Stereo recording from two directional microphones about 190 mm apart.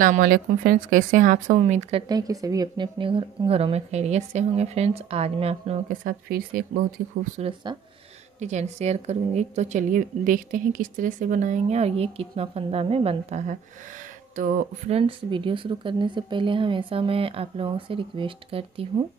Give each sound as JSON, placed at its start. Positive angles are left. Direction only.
{"t": 0.0, "sound": "a woman's voice", "side_deg": -45}
{"t": 5.9, "sound": "speech", "side_deg": -50}
{"t": 7.3, "sound": "a woman's voice", "side_deg": -30}
{"t": 15.0, "sound": "speech", "side_deg": -25}